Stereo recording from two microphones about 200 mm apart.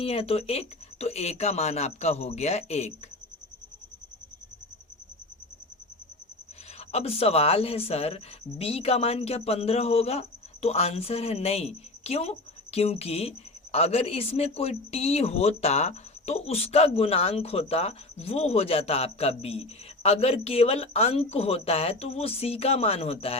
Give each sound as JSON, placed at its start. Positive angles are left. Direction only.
{"t": 0.0, "sound": "speech", "side_deg": 30}
{"t": 6.7, "sound": "speech", "side_deg": 30}